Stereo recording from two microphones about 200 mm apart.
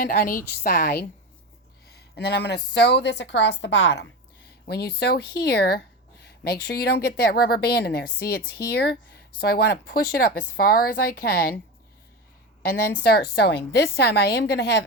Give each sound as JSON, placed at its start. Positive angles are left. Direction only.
{"t": 0.0, "sound": "speech", "side_deg": 45}
{"t": 2.1, "sound": "a woman's voice", "side_deg": 55}
{"t": 4.6, "sound": "speech", "side_deg": 55}
{"t": 13.1, "sound": "a woman's voice", "side_deg": 50}